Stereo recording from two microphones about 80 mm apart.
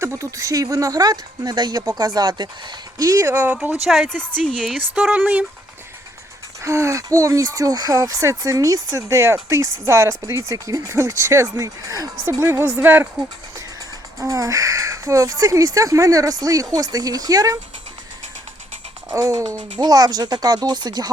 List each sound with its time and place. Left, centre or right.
0.0 s speech: right
3.0 s speech: right
3.2 s a woman's voice: right
3.8 s a woman's voice: centre
4.1 s a woman's voice: centre
4.9 s speech: centre
6.6 s speech: right
12.4 s a woman's voice: right
14.2 s speech: right
19.1 s speech: right
19.7 s speech: right